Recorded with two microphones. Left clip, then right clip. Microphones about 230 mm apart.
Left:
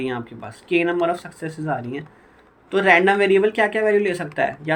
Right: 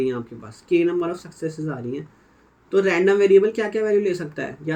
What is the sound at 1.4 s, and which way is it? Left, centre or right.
Speech, centre.